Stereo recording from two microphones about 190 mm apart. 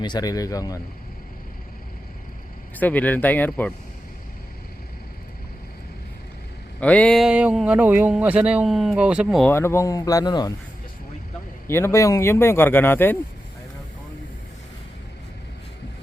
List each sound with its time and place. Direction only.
0.0 s speech: 20° left (ahead or behind)
2.7 s speech: 10° left (ahead or behind)
6.7 s a man's voice: 5° left (ahead or behind)
9.5 s speech: 15° left (ahead or behind)
11.7 s speech: 15° left (ahead or behind)